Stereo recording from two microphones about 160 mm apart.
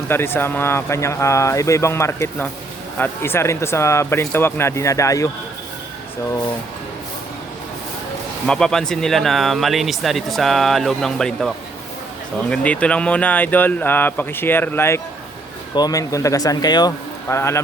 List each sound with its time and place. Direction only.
0.1 s speech: 15° left (ahead or behind)
8.4 s speech: 5° left (ahead or behind)